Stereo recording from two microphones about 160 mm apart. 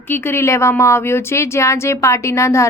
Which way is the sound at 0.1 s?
15° left (ahead or behind).